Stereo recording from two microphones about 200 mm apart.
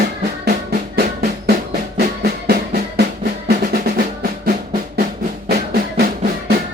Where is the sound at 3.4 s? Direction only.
50° right (ahead or behind).